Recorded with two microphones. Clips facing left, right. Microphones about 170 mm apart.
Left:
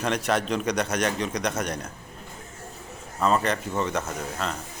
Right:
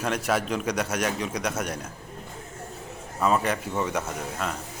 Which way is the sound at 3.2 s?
10° right (ahead or behind).